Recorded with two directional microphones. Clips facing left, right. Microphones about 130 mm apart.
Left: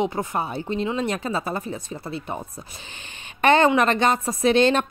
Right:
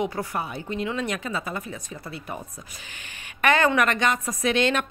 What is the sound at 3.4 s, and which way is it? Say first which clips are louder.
A woman's voice: left 4 dB; 25° left (ahead or behind).